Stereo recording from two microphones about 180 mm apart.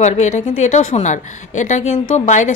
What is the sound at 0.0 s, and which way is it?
A woman's voice, 40° left (ahead or behind).